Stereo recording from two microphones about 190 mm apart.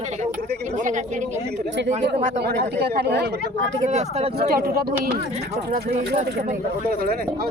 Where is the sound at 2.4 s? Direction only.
55° right (ahead or behind).